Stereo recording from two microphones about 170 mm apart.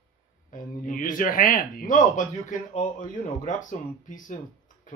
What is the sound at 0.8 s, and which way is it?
Speech, 50° left (ahead or behind).